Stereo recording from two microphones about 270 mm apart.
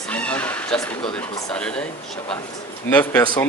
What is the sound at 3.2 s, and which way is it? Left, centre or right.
Speech, centre.